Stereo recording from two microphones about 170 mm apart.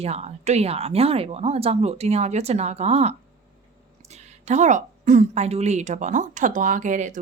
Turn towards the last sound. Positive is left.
turn(degrees=-45)  # may be behind; listen again after turning